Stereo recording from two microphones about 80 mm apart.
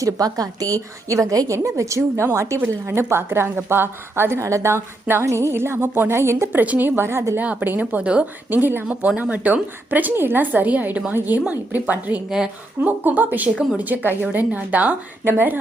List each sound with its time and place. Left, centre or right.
0.0 s a woman's voice: right
7.3 s a woman's voice: centre